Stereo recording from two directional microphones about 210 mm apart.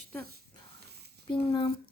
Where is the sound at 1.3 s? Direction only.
20° left (ahead or behind).